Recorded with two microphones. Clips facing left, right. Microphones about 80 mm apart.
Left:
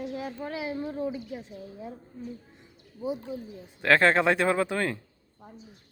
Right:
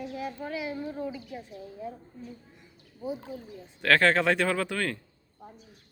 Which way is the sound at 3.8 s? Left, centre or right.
Left.